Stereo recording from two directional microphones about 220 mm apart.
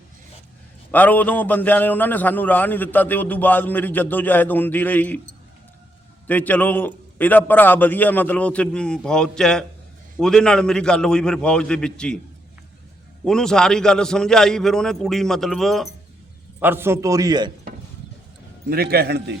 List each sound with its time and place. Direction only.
0.9 s a man's voice: 10° left (ahead or behind)
6.2 s a man's voice: 5° left (ahead or behind)
13.2 s a man's voice: 5° left (ahead or behind)
16.6 s a man's voice: 10° right (ahead or behind)
18.7 s a man's voice: 45° right (ahead or behind)